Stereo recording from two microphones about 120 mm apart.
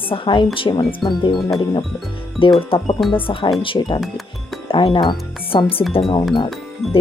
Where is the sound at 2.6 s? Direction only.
50° left (ahead or behind).